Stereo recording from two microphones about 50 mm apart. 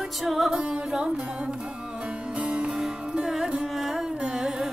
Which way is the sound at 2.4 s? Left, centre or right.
Right.